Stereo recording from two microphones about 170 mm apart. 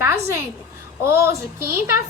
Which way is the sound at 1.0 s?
15° right (ahead or behind).